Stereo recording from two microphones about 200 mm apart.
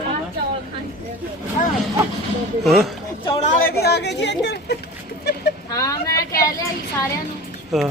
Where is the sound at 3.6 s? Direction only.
55° left (ahead or behind).